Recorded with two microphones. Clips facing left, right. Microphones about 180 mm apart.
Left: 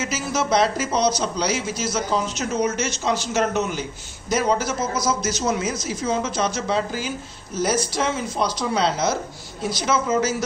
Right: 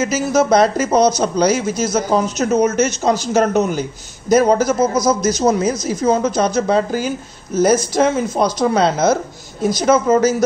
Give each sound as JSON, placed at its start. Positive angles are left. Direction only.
{"t": 0.0, "sound": "a woman's voice", "side_deg": -45}